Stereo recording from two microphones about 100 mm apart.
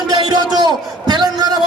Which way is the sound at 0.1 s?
45° right (ahead or behind).